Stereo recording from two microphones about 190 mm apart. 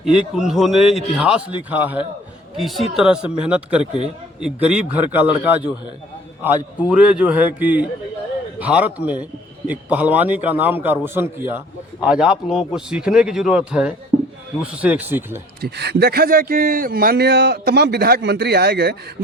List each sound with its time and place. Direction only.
0.0 s a man's voice: centre (ahead or behind)
15.6 s speech: 60° right (ahead or behind)